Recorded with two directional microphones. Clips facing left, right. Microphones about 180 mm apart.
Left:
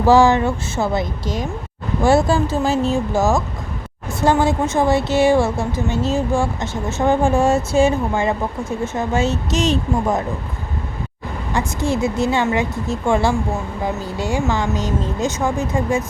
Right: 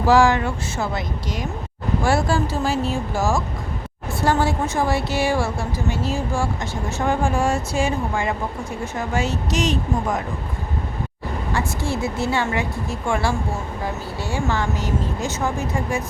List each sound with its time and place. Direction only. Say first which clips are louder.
0.1 s speech: left 3 dB; 25° left (ahead or behind)
11.5 s speech: left 5 dB; 20° left (ahead or behind)